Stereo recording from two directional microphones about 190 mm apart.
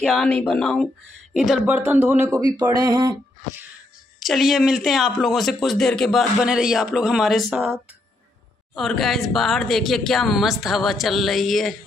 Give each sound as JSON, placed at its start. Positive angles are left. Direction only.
{"t": 0.0, "sound": "speech", "side_deg": 5}
{"t": 4.2, "sound": "speech", "side_deg": 0}
{"t": 8.7, "sound": "speech", "side_deg": 0}